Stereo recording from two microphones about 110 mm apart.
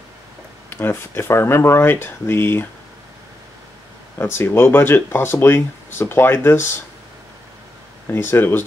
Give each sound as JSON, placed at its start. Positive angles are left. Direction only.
{"t": 0.7, "sound": "speech", "side_deg": 20}
{"t": 4.2, "sound": "speech", "side_deg": 20}
{"t": 8.1, "sound": "speech", "side_deg": 20}